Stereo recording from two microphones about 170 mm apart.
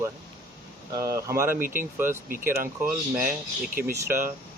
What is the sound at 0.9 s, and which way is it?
Speech, 20° right (ahead or behind).